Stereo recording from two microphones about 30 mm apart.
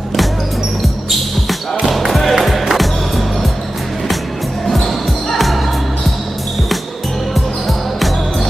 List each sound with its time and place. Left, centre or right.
1.9 s music: centre
2.4 s skateboard: centre
4.6 s basketball bounce: centre
7.3 s music: centre